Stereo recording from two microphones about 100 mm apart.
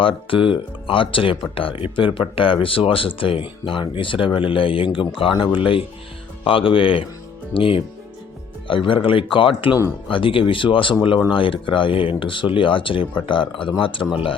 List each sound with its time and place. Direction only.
0.0 s speech: 60° left (ahead or behind)